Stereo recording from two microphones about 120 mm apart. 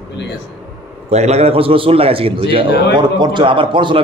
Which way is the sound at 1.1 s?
65° right (ahead or behind).